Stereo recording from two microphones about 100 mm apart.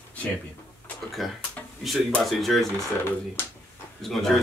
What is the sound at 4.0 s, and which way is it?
Speech, 5° left (ahead or behind).